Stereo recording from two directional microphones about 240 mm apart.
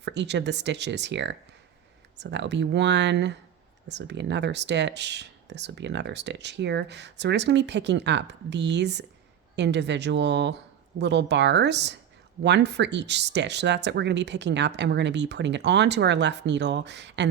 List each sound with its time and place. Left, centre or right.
0.0 s speech: right